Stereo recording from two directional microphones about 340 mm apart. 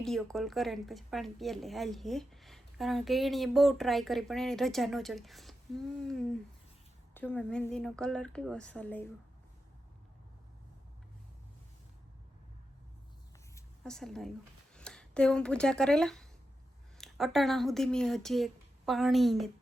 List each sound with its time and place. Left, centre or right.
0.0 s speech: centre
13.6 s a woman's voice: centre